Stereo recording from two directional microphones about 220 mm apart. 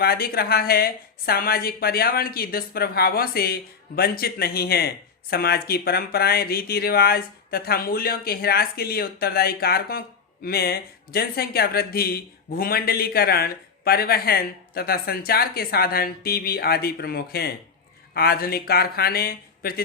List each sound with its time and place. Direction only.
0.0 s speech: 45° left (ahead or behind)